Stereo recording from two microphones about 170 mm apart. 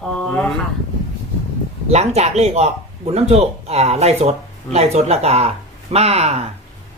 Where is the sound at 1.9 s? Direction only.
40° right (ahead or behind).